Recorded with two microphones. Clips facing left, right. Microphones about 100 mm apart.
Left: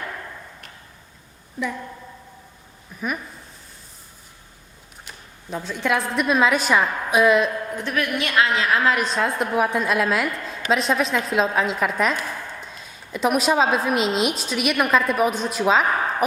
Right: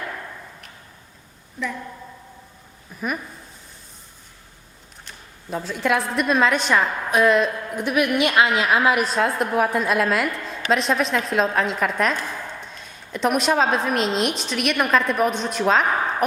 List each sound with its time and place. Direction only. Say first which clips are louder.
2.9 s a woman's voice: right 1 dB; centre (ahead or behind)
5.5 s a woman's voice: right 1 dB; 5° right (ahead or behind)
7.8 s a woman's voice: right 7 dB; 15° right (ahead or behind); by 15.9 s 5° left (ahead or behind)